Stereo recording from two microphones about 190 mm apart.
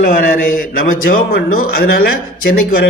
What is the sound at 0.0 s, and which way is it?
Speech, 45° left (ahead or behind).